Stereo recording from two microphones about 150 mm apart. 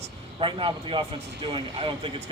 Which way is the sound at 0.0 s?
35° right (ahead or behind).